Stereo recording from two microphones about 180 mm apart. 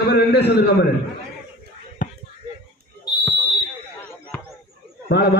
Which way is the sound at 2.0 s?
45° left (ahead or behind).